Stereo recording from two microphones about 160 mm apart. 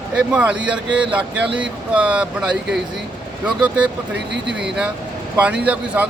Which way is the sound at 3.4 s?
10° right (ahead or behind).